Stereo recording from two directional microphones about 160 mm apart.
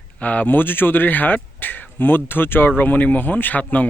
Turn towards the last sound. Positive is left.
turn(degrees=10)  # may be behind; listen again after turning